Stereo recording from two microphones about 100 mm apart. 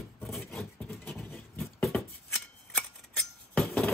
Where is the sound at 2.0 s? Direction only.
5° left (ahead or behind).